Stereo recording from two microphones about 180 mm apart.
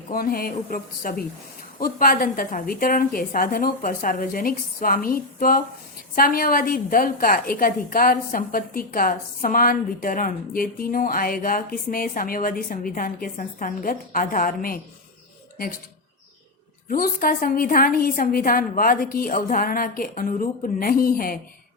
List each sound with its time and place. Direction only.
0.1 s a woman's voice: 50° left (ahead or behind)
16.9 s a woman's voice: 50° left (ahead or behind)